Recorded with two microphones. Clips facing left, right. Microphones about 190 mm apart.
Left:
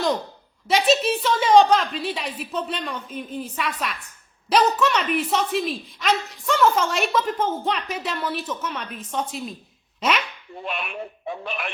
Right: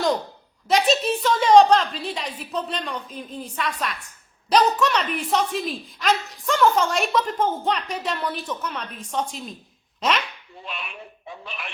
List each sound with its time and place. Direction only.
0.7 s a woman's voice: centre (ahead or behind)
10.6 s a man's voice: 60° left (ahead or behind)